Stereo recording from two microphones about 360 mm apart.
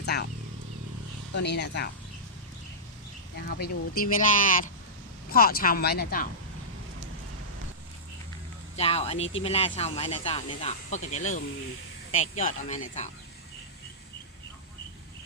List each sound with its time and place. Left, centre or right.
0.0 s wild animals: left
1.3 s speech: left
3.3 s speech: left
8.7 s speech: centre
9.1 s speech: left
9.4 s speech: centre
12.5 s speech: centre